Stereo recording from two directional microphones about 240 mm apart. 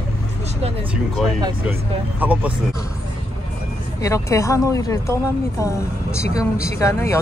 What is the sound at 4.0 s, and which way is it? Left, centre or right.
Speech, centre.